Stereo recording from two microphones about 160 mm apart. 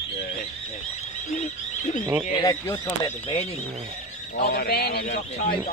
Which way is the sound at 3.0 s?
40° left (ahead or behind).